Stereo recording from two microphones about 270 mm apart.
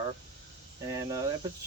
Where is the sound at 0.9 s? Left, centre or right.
Centre.